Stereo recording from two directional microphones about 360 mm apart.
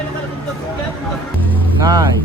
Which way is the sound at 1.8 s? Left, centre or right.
Centre.